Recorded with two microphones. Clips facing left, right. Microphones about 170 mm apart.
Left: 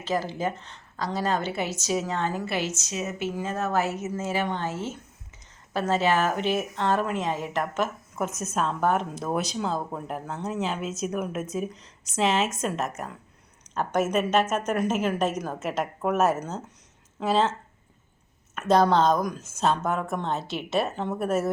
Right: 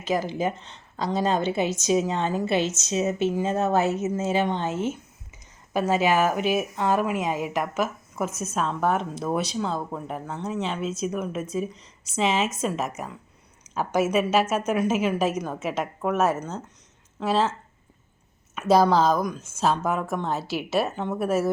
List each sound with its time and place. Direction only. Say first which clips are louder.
0.0 s a woman's voice: right 2 dB; 15° right (ahead or behind)
18.5 s speech: right 1 dB; 5° right (ahead or behind)